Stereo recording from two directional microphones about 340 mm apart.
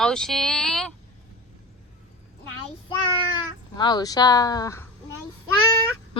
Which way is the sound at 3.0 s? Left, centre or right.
Centre.